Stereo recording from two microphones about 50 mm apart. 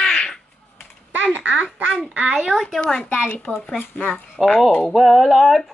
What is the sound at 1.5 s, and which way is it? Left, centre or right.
Speech, centre.